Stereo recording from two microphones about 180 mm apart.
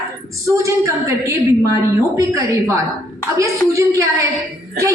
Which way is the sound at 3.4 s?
15° right (ahead or behind).